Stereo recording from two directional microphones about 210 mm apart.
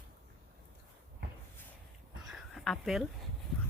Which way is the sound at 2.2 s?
Centre (ahead or behind).